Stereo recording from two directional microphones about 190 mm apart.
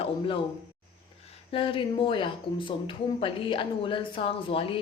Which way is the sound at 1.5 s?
25° left (ahead or behind).